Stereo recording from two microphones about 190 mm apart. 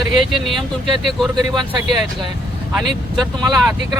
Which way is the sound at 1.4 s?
20° right (ahead or behind).